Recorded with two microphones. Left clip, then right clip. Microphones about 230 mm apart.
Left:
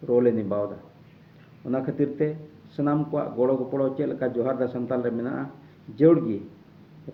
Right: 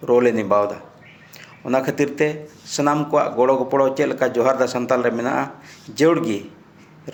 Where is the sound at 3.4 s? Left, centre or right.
Centre.